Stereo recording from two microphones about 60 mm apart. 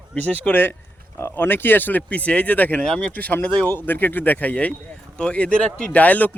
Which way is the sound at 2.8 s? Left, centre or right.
Centre.